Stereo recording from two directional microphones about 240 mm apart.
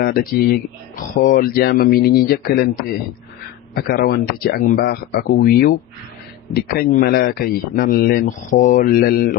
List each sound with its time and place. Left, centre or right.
0.0 s speech: left